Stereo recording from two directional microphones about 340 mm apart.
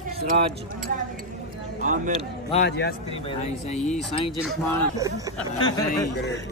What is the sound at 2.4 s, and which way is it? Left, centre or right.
Speech, left.